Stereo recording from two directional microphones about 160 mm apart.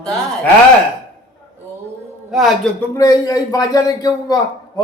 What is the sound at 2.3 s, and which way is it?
Speech, centre (ahead or behind).